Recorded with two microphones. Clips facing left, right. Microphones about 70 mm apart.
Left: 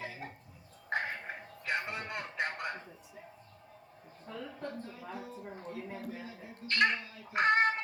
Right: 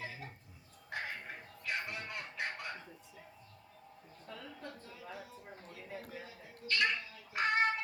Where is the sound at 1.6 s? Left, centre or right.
Left.